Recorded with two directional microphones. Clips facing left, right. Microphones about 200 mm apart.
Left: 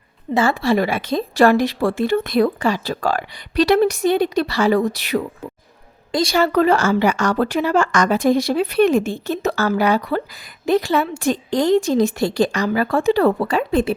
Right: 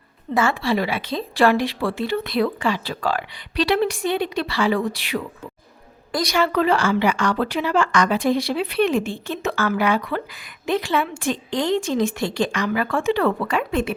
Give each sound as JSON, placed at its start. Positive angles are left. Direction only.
{"t": 0.3, "sound": "a woman's voice", "side_deg": 35}
{"t": 6.1, "sound": "a woman's voice", "side_deg": 25}
{"t": 6.3, "sound": "a woman's voice", "side_deg": 40}